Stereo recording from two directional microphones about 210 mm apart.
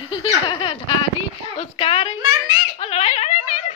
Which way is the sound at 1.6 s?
30° left (ahead or behind).